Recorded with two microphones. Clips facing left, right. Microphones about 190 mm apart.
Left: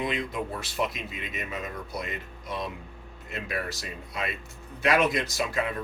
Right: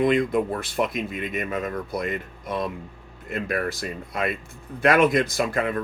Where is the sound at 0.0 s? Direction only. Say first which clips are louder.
Right 10 dB; 50° right (ahead or behind).